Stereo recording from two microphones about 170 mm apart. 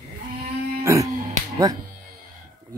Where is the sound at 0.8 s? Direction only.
20° right (ahead or behind).